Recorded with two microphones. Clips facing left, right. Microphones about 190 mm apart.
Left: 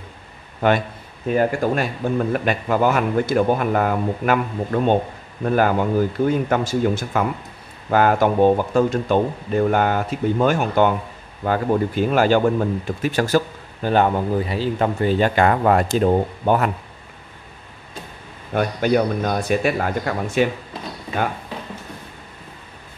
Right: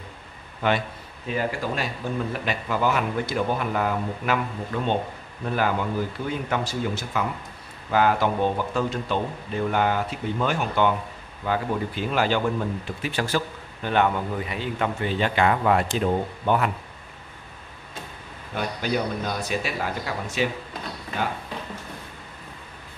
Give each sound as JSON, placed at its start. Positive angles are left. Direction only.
{"t": 0.6, "sound": "speech", "side_deg": 50}
{"t": 18.5, "sound": "a man's voice", "side_deg": 55}